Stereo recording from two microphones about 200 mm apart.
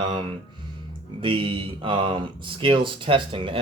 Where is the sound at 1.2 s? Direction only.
25° right (ahead or behind).